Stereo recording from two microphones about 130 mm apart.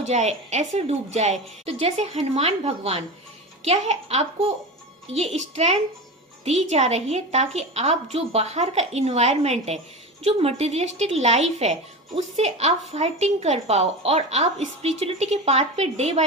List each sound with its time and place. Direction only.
0.0 s speech: 60° right (ahead or behind)